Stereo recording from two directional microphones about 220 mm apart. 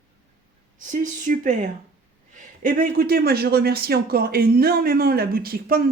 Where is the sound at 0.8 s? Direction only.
35° right (ahead or behind).